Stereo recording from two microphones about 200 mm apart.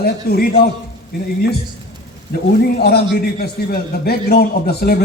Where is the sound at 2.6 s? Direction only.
50° left (ahead or behind).